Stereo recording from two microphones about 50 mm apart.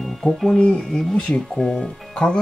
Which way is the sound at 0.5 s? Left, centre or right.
Centre.